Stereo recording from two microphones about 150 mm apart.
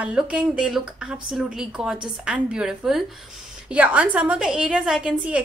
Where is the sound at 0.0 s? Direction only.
5° right (ahead or behind).